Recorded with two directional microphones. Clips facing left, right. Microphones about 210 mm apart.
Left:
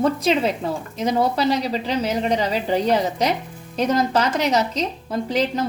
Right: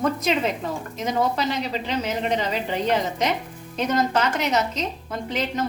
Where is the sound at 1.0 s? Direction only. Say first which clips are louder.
Left 3 dB; 35° left (ahead or behind).